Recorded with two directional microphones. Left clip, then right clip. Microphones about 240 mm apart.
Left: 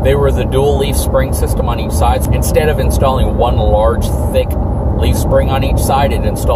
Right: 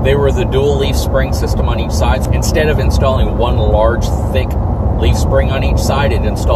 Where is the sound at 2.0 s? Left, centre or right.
Centre.